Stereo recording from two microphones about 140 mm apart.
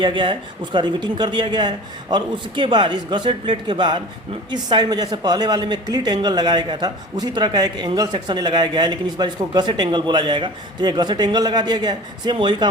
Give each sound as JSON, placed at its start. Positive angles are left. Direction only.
{"t": 0.0, "sound": "a woman's voice", "side_deg": -35}